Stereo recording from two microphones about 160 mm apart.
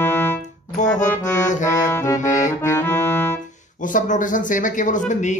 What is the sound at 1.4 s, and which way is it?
Speech, 50° left (ahead or behind).